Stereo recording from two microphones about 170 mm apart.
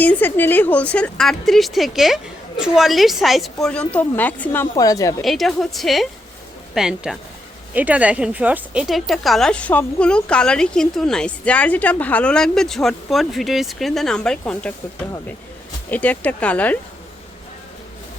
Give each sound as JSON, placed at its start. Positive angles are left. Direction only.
{"t": 0.0, "sound": "a woman's voice", "side_deg": 10}
{"t": 4.7, "sound": "a woman's voice", "side_deg": 20}
{"t": 5.2, "sound": "speech", "side_deg": 0}
{"t": 15.9, "sound": "a woman's voice", "side_deg": 10}